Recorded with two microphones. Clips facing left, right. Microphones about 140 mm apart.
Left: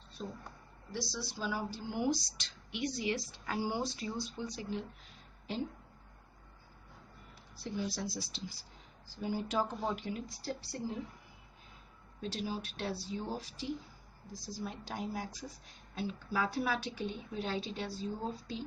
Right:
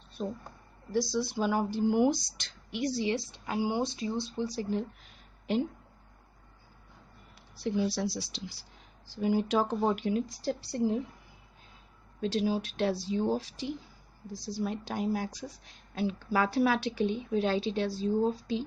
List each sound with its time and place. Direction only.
0.2 s speech: 50° right (ahead or behind)
7.5 s speech: 75° right (ahead or behind)
12.2 s a woman's voice: 85° right